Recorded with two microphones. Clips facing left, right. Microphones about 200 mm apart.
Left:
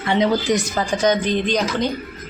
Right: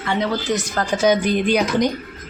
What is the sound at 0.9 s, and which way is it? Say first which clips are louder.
Speech: right 2 dB; 10° right (ahead or behind).